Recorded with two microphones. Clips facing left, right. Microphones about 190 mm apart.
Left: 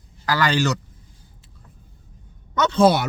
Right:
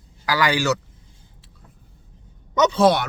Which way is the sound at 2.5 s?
15° right (ahead or behind).